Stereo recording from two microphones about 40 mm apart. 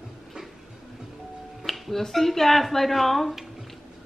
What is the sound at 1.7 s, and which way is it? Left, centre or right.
Music, centre.